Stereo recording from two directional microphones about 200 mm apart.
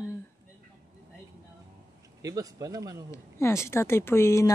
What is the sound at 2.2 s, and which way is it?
Speech, 15° right (ahead or behind).